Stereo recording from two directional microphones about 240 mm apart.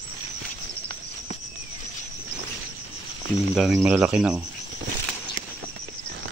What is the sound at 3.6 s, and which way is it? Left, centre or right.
Speech, centre.